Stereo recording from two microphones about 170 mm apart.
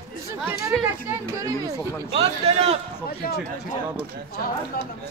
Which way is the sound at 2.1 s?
35° right (ahead or behind).